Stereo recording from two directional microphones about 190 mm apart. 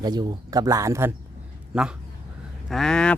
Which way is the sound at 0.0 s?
20° right (ahead or behind).